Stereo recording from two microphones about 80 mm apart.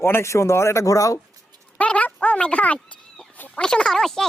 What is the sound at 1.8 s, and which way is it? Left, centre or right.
Chicken, centre.